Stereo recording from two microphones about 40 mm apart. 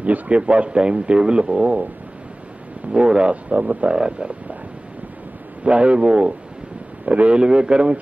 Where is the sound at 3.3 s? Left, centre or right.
Right.